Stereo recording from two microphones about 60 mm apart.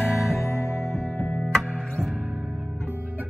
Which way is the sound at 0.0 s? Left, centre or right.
Centre.